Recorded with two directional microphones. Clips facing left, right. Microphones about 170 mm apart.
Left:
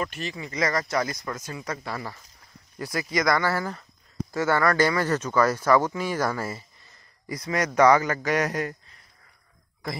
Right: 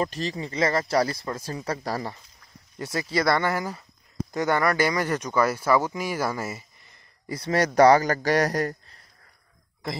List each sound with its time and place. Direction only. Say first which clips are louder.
0.0 s speech: right 4 dB; 35° right (ahead or behind)
3.5 s speech: even; 10° right (ahead or behind)
7.2 s speech: right 3 dB; 30° right (ahead or behind)
9.8 s speech: right 1 dB; 25° right (ahead or behind)